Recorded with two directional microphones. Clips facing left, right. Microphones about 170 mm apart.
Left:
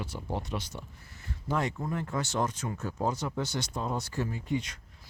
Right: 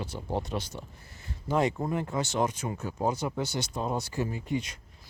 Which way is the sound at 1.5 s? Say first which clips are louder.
Right 4 dB; 20° right (ahead or behind).